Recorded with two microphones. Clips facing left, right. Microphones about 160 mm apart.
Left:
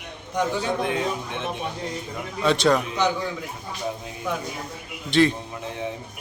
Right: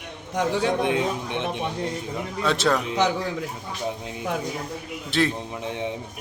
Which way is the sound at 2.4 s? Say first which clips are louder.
Left 3 dB; centre (ahead or behind).